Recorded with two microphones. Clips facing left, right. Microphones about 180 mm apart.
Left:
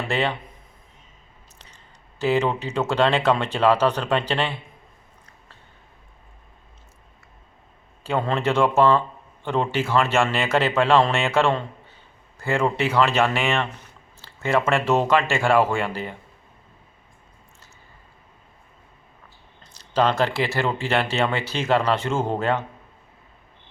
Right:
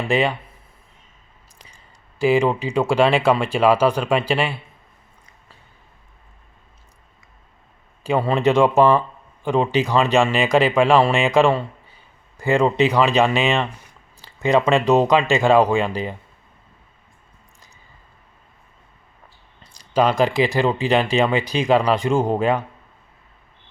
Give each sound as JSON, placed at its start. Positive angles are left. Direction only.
{"t": 0.1, "sound": "speech", "side_deg": -15}
{"t": 1.5, "sound": "speech", "side_deg": -10}
{"t": 8.0, "sound": "speech", "side_deg": -10}
{"t": 19.6, "sound": "speech", "side_deg": -10}